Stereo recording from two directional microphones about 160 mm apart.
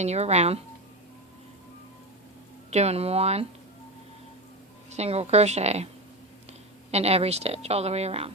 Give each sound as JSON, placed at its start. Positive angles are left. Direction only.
{"t": 0.0, "sound": "speech", "side_deg": -45}
{"t": 2.6, "sound": "a woman's voice", "side_deg": -40}
{"t": 4.9, "sound": "a woman's voice", "side_deg": -40}
{"t": 6.9, "sound": "a woman's voice", "side_deg": -40}